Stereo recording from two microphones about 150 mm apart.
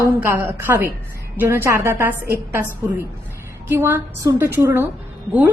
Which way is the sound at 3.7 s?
15° right (ahead or behind).